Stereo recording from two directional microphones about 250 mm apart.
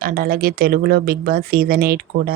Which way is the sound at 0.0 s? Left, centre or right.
Right.